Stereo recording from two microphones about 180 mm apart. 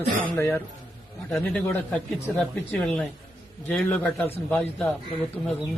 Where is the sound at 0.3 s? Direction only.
10° left (ahead or behind).